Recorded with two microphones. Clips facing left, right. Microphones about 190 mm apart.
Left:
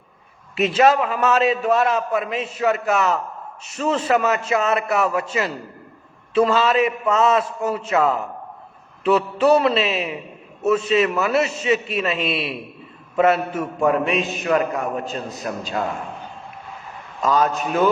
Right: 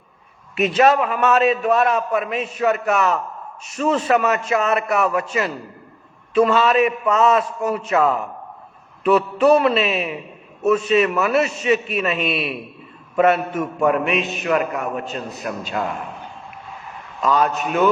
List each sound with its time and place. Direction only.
0.8 s a man's voice: 30° left (ahead or behind)
17.4 s a man's voice: 30° left (ahead or behind)